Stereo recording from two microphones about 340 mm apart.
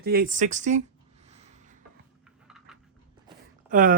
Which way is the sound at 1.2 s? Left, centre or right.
Centre.